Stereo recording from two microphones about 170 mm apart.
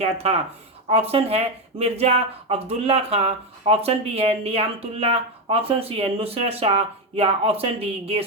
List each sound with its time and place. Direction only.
0.0 s speech: 40° right (ahead or behind)